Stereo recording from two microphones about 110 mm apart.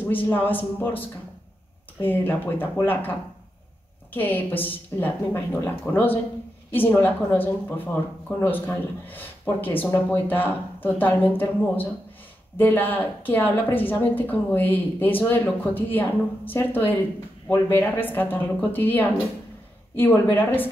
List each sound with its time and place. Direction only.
0.0 s speech: 15° left (ahead or behind)